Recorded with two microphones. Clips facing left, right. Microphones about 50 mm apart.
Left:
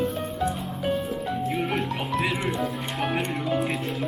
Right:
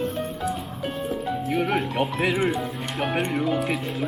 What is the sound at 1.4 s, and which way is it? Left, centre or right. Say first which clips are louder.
Speech: right 3 dB; right.